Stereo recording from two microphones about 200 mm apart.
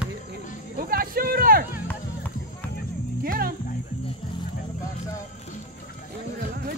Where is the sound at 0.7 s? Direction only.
45° right (ahead or behind).